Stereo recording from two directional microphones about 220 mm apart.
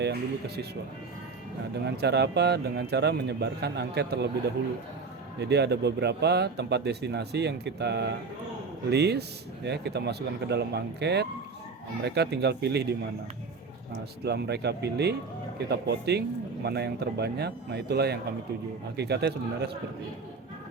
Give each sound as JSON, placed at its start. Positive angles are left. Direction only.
{"t": 0.0, "sound": "speech", "side_deg": -45}
{"t": 2.0, "sound": "speech", "side_deg": -50}
{"t": 14.3, "sound": "speech", "side_deg": -50}